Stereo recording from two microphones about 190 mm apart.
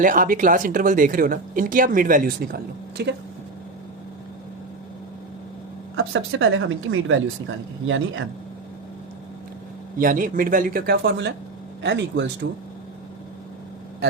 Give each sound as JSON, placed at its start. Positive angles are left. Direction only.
{"t": 0.0, "sound": "speech", "side_deg": -45}
{"t": 3.0, "sound": "speech", "side_deg": -60}
{"t": 6.0, "sound": "speech", "side_deg": -90}
{"t": 10.0, "sound": "speech", "side_deg": -45}